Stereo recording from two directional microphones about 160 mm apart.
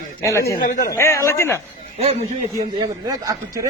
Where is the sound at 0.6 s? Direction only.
65° left (ahead or behind).